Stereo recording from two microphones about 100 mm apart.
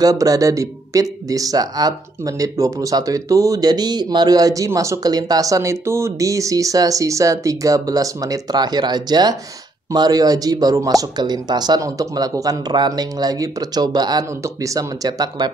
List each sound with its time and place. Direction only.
0.0 s speech: 35° right (ahead or behind)
14.4 s speech: 35° right (ahead or behind)